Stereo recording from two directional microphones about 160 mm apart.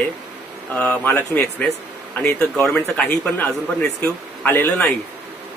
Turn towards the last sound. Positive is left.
turn(degrees=10)  # may be behind; listen again after turning